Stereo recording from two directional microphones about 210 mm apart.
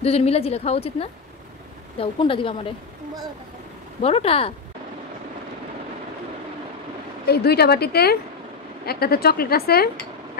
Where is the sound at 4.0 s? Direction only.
30° left (ahead or behind).